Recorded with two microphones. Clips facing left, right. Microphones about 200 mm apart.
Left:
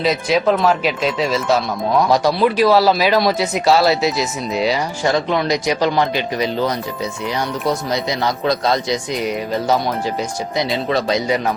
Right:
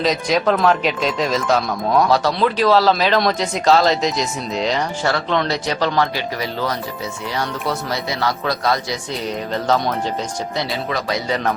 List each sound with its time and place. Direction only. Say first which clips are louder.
0.0 s speech: left 1 dB; 5° left (ahead or behind)
8.2 s a man's voice: left 1 dB; 20° left (ahead or behind)
9.2 s speech: right 1 dB; 10° left (ahead or behind)
10.8 s a man's voice: left 5 dB; 30° left (ahead or behind)